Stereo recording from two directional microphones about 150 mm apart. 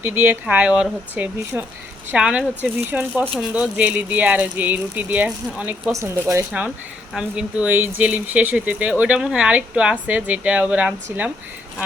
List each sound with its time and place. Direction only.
0.0 s speech: 15° right (ahead or behind)